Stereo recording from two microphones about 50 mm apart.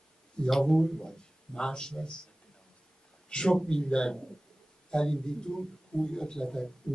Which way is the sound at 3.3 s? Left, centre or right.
Centre.